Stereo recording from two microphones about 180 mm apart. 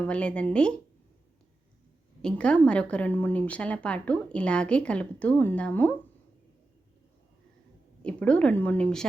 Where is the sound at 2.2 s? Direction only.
5° left (ahead or behind).